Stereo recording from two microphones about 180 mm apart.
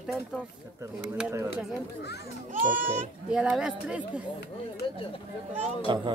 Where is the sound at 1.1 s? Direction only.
10° right (ahead or behind).